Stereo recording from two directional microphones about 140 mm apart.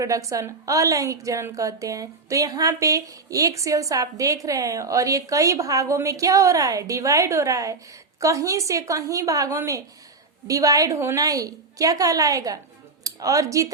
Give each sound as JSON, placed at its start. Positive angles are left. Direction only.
{"t": 0.0, "sound": "a woman's voice", "side_deg": -25}